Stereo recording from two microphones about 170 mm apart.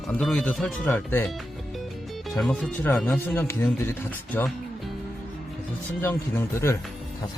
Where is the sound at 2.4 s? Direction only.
5° left (ahead or behind).